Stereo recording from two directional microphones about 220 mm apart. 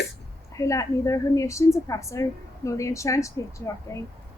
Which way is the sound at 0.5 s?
15° left (ahead or behind).